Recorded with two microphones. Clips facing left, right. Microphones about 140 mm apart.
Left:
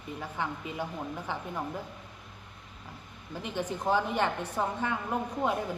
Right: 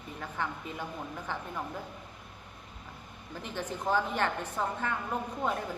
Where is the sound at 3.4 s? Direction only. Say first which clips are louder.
Left 3 dB; 15° left (ahead or behind).